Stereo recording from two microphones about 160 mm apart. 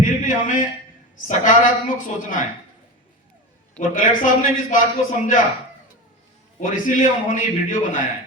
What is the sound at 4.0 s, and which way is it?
Speech, 60° left (ahead or behind).